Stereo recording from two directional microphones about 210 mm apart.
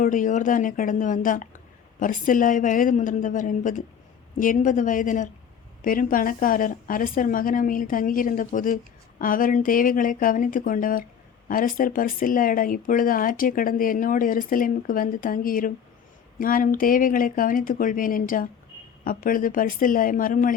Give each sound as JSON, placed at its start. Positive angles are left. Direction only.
{"t": 0.0, "sound": "a woman's voice", "side_deg": 40}